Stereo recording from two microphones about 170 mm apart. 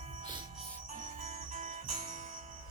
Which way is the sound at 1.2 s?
45° right (ahead or behind).